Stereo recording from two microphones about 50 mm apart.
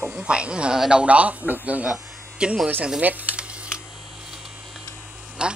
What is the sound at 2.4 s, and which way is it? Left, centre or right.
Speech, centre.